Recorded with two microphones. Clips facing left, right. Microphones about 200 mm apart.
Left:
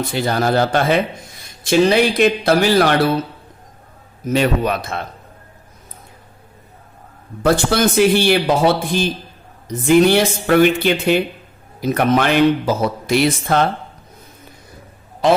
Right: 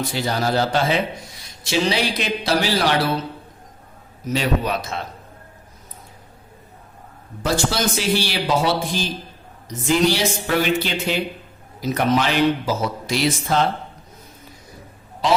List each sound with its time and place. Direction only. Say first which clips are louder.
0.1 s speech: left 6 dB; 55° left (ahead or behind)
4.3 s speech: left 5 dB; 55° left (ahead or behind)
7.4 s speech: left 6 dB; 55° left (ahead or behind)